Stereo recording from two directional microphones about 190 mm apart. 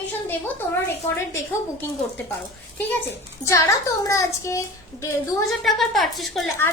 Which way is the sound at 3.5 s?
15° left (ahead or behind).